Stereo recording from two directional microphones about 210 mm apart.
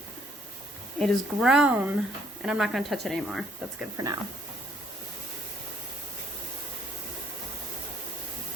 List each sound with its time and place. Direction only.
0.9 s speech: centre (ahead or behind)
3.9 s speech: 15° right (ahead or behind)